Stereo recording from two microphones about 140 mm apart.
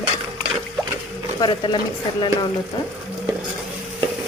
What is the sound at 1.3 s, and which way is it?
Speech, 35° left (ahead or behind).